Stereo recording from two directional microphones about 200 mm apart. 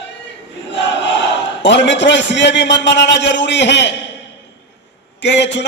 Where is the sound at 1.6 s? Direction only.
60° left (ahead or behind).